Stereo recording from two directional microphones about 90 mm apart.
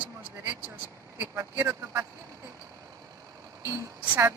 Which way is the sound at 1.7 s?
30° right (ahead or behind).